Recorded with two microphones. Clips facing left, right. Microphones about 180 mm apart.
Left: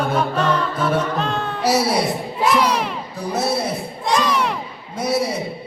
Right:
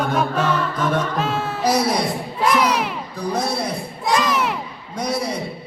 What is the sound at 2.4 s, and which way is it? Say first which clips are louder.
Crowd: even; centre (ahead or behind).